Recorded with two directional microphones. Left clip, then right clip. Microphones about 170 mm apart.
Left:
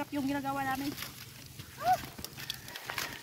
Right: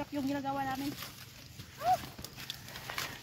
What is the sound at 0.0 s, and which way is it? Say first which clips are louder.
Speech: left 1 dB; 10° right (ahead or behind).